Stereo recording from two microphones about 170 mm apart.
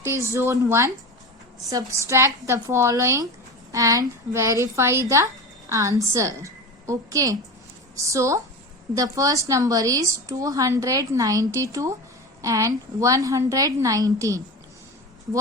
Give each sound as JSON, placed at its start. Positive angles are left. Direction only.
{"t": 0.0, "sound": "a woman's voice", "side_deg": -15}